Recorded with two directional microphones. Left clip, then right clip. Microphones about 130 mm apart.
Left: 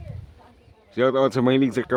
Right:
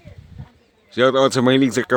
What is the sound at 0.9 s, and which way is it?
Speech, 20° right (ahead or behind).